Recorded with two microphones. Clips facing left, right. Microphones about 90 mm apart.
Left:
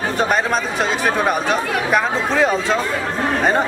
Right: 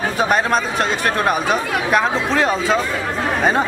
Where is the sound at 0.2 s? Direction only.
Centre (ahead or behind).